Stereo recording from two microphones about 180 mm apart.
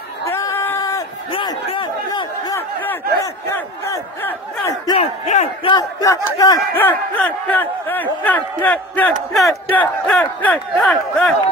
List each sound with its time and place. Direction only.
0.2 s a sound: 15° left (ahead or behind)
2.5 s crowd: 15° left (ahead or behind)
4.9 s speech: 35° left (ahead or behind); by 11.3 s centre (ahead or behind)